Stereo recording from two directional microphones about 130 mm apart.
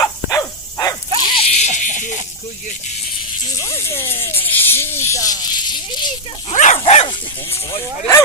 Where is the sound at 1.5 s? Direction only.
65° left (ahead or behind).